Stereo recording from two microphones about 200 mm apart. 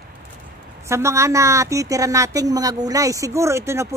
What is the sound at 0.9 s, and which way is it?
A woman's voice, 15° right (ahead or behind).